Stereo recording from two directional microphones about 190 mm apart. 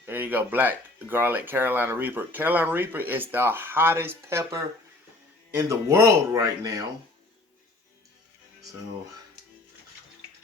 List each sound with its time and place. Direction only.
0.0 s speech: 10° right (ahead or behind)